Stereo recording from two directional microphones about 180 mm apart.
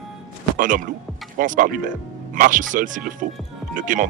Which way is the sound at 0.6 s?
45° right (ahead or behind).